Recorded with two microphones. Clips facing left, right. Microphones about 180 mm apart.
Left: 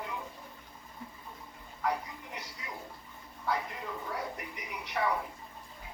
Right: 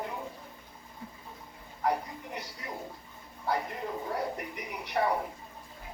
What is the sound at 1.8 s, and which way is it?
Speech, 35° right (ahead or behind).